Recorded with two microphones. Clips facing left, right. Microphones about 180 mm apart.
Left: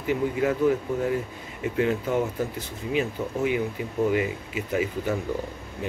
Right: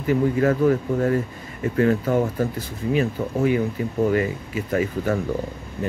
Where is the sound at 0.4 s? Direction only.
15° left (ahead or behind).